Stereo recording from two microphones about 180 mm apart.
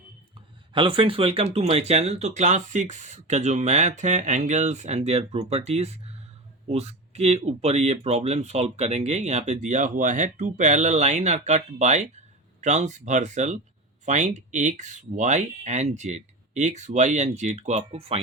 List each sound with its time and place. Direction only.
0.7 s speech: 30° right (ahead or behind)